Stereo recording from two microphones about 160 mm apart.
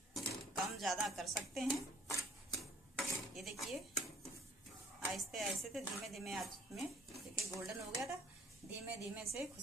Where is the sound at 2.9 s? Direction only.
Centre (ahead or behind).